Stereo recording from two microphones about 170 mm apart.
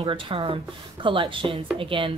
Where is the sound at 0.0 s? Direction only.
30° right (ahead or behind).